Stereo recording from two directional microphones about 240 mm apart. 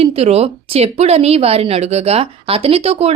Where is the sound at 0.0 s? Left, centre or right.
Right.